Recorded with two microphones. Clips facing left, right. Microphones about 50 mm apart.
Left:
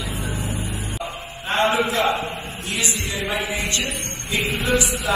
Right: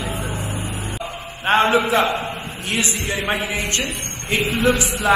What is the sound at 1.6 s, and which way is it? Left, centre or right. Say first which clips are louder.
A man's voice: right 1 dB; right.